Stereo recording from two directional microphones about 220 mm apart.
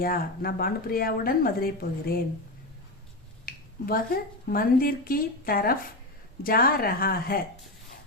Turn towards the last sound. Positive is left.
turn(degrees=40)  # may be behind; listen again after turning